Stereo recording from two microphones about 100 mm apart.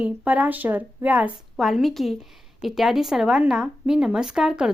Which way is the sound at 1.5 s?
Centre (ahead or behind).